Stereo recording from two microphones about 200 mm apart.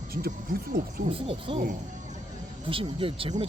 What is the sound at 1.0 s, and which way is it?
Speech, 25° right (ahead or behind).